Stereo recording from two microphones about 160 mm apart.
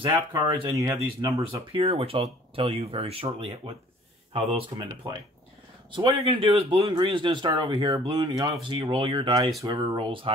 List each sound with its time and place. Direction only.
0.0 s speech: 30° right (ahead or behind)
5.9 s speech: 30° right (ahead or behind)